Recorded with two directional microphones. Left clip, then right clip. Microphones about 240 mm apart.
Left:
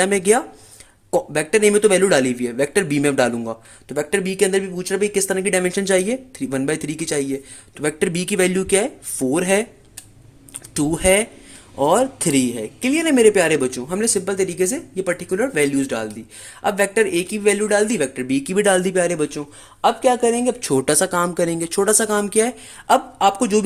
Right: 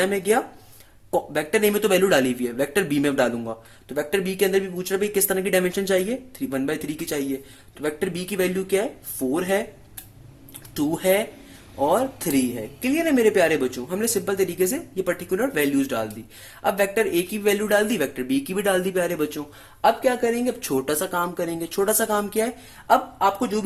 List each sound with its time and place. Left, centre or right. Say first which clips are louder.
0.0 s speech: left 4 dB; left
10.8 s speech: left 4 dB; left